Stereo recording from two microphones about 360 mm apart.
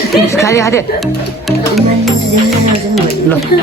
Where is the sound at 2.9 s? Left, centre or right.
Centre.